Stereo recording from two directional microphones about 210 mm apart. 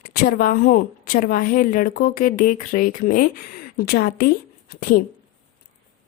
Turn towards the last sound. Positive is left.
turn(degrees=45)  # may be behind; listen again after turning